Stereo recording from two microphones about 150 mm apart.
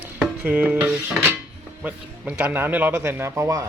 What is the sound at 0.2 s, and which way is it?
Cutlery, 10° right (ahead or behind).